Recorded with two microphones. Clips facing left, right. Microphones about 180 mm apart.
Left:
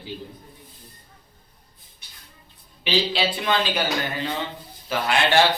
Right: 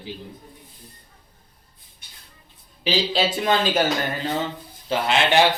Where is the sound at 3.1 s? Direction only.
45° right (ahead or behind).